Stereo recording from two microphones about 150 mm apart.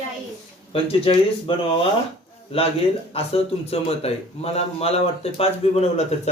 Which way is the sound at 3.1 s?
40° left (ahead or behind).